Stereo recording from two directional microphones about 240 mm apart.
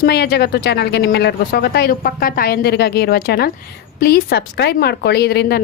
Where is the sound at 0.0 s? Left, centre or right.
Left.